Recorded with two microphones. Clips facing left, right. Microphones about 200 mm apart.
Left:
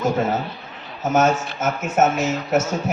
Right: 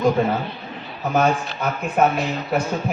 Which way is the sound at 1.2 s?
45° left (ahead or behind).